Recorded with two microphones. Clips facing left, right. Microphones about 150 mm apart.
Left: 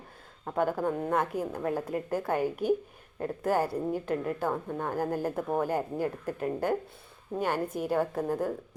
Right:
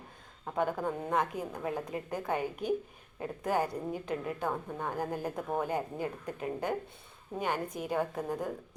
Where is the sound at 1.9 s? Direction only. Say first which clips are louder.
Left 5 dB; 50° left (ahead or behind).